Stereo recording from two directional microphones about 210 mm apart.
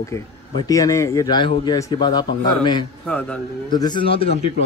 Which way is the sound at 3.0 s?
5° left (ahead or behind).